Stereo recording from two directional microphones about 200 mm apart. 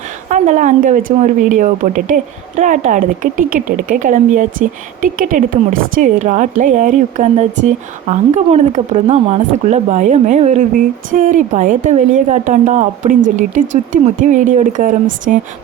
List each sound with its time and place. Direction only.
0.3 s a woman's voice: 40° right (ahead or behind)